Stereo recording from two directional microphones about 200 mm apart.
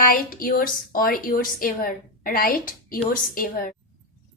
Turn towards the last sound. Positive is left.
turn(degrees=45)  # may be behind; listen again after turning